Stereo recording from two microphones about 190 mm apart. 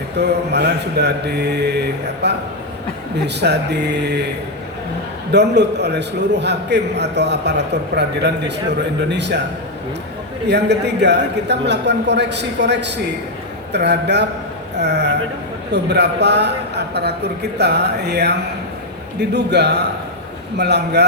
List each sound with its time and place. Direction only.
0.2 s a man's voice: 60° right (ahead or behind)
5.3 s a man's voice: 60° right (ahead or behind)
10.5 s a man's voice: 60° right (ahead or behind)